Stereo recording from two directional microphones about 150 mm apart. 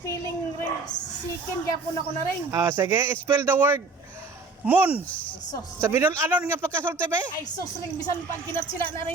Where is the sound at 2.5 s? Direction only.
15° right (ahead or behind).